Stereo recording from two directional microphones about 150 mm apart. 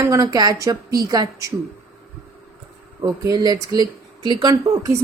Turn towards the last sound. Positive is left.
turn(degrees=-25)  # may be behind; listen again after turning